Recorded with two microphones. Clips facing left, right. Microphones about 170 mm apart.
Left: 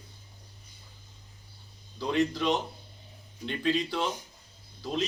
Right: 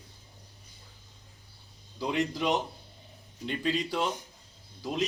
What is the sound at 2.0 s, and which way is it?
Speech, 15° right (ahead or behind).